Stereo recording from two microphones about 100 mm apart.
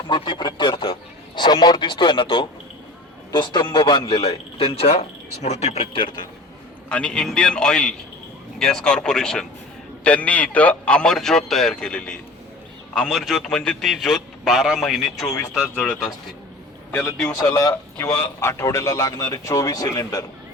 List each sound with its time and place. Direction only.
0.1 s a man's voice: 50° left (ahead or behind)
1.4 s a man's voice: 45° left (ahead or behind); by 2.5 s 60° left (ahead or behind)
3.3 s a man's voice: 50° left (ahead or behind)
6.8 s a man's voice: 10° left (ahead or behind)
15.7 s a man's voice: 10° left (ahead or behind)
17.4 s a man's voice: 35° left (ahead or behind)